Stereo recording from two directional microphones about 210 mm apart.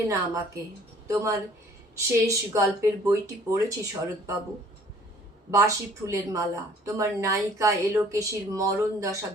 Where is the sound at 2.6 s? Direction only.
15° right (ahead or behind).